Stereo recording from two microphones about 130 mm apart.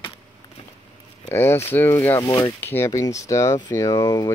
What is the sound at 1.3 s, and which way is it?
Speech, 20° left (ahead or behind).